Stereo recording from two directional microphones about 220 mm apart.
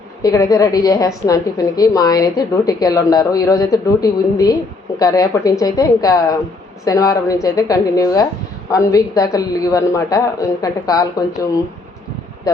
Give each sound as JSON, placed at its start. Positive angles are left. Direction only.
{"t": 0.2, "sound": "a woman's voice", "side_deg": 15}